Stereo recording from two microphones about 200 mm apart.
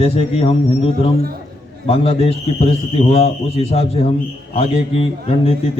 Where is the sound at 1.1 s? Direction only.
50° right (ahead or behind).